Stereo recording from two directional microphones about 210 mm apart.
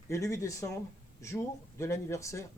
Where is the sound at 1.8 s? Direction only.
15° left (ahead or behind).